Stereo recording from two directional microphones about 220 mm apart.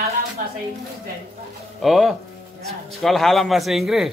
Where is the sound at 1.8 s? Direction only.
Centre (ahead or behind).